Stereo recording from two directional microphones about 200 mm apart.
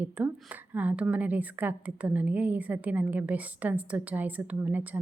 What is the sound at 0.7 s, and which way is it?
A woman's voice, 10° right (ahead or behind).